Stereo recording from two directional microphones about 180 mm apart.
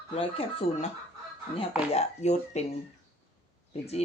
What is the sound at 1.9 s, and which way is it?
Speech, 40° left (ahead or behind).